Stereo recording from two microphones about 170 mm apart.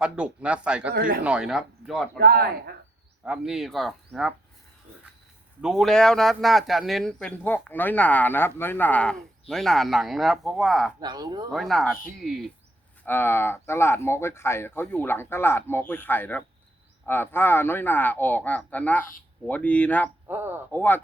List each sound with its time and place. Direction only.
0.0 s speech: 5° right (ahead or behind)
0.9 s a man's voice: 60° right (ahead or behind)
1.2 s speech: 5° right (ahead or behind)
2.1 s a man's voice: 65° right (ahead or behind)
3.2 s speech: 5° right (ahead or behind)
5.6 s speech: centre (ahead or behind)
11.0 s speech: 25° right (ahead or behind)
11.5 s speech: centre (ahead or behind)
13.1 s speech: 15° left (ahead or behind)
20.2 s speech: 15° right (ahead or behind)
20.7 s speech: 10° left (ahead or behind)